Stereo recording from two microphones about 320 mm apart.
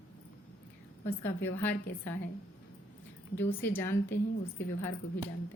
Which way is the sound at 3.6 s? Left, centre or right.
Centre.